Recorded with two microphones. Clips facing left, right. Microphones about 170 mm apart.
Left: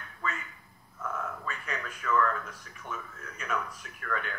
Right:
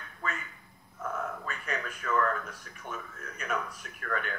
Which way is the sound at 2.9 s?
45° right (ahead or behind).